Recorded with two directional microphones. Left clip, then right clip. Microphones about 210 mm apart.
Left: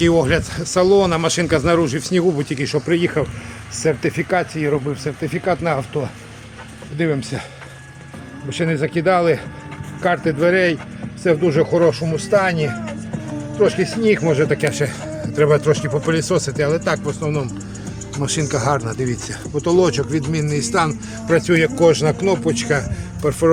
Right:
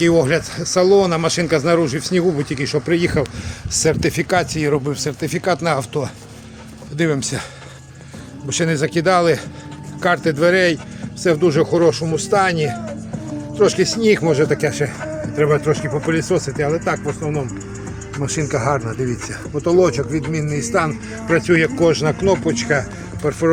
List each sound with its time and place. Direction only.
0.0 s speech: 5° right (ahead or behind)
8.4 s speech: centre (ahead or behind)